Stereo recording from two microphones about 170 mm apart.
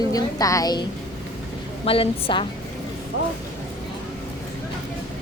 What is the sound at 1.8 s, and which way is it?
Speech, 35° left (ahead or behind).